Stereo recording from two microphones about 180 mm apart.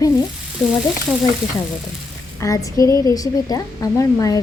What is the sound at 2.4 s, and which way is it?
A woman's voice, 20° left (ahead or behind).